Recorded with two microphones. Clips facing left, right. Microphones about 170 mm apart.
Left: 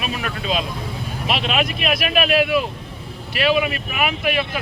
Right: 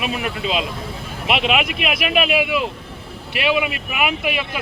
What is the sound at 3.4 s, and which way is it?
Speech, 15° right (ahead or behind).